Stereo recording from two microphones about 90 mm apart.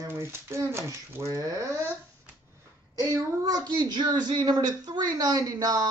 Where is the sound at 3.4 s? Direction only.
50° right (ahead or behind).